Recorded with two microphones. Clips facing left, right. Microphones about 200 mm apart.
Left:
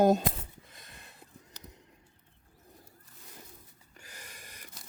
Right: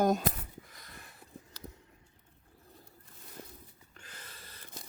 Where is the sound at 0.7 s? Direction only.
25° left (ahead or behind).